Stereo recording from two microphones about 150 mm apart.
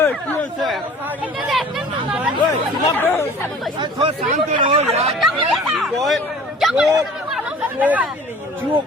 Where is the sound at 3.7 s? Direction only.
30° right (ahead or behind).